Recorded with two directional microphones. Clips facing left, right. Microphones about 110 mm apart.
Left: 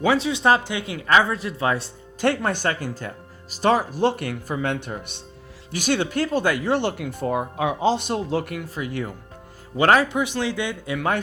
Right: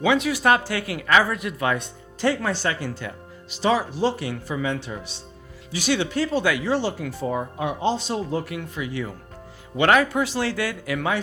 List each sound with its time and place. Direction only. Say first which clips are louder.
0.1 s speech: even; 25° left (ahead or behind)
2.2 s speech: left 1 dB; 60° left (ahead or behind); by 8.5 s 90° left
8.7 s speech: left 1 dB; 50° left (ahead or behind)
9.7 s speech: left 1 dB; 35° left (ahead or behind)
10.1 s speech: even; 20° left (ahead or behind)